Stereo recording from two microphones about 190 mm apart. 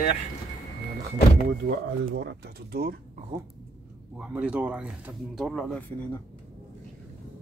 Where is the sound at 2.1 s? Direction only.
60° right (ahead or behind).